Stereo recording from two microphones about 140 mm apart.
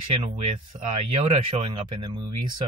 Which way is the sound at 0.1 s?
45° right (ahead or behind).